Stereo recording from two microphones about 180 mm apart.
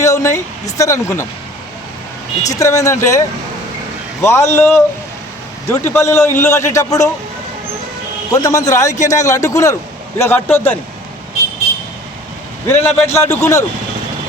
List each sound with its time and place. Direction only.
0.0 s speech: 15° left (ahead or behind)
2.5 s a man's voice: 20° left (ahead or behind)
8.3 s a man's voice: 20° left (ahead or behind)
12.6 s a man's voice: 10° left (ahead or behind)